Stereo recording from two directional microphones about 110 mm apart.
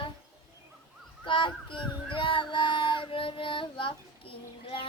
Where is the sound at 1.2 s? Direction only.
50° left (ahead or behind).